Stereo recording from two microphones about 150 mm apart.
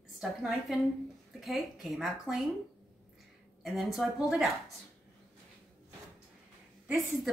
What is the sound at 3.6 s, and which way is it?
Speech, centre (ahead or behind).